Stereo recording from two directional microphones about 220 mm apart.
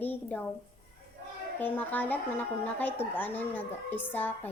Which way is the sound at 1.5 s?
10° left (ahead or behind).